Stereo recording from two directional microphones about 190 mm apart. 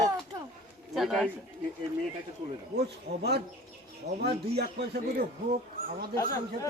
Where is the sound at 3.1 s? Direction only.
60° right (ahead or behind).